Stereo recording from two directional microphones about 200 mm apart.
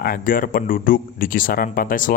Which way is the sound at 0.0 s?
45° left (ahead or behind).